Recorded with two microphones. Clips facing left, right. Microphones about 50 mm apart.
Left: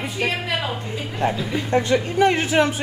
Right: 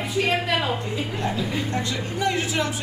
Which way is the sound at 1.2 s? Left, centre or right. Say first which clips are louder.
Left 6 dB; left.